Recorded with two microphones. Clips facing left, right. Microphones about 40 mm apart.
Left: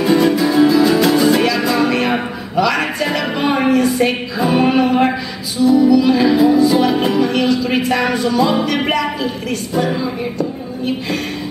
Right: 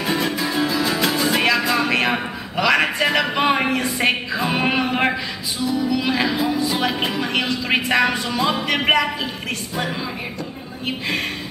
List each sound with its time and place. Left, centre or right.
0.0 s music: centre
2.5 s a man's voice: centre
4.4 s music: centre
5.7 s speech: centre
5.9 s a man's voice: right
6.2 s speech: centre
6.8 s music: centre
7.3 s a man's voice: right
8.0 s music: centre
8.8 s a man's voice: right